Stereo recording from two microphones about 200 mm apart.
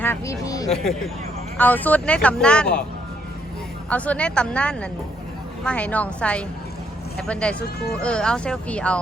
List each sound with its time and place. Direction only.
0.0 s speech: 15° left (ahead or behind)
3.8 s a woman's voice: 5° left (ahead or behind)